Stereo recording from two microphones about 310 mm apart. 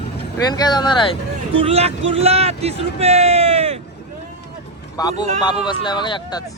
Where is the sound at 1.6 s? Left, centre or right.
Centre.